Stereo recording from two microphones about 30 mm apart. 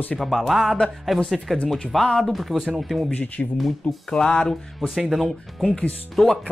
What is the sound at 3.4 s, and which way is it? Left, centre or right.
Speech, left.